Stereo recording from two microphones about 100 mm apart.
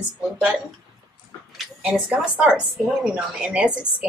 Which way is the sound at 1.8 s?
15° right (ahead or behind).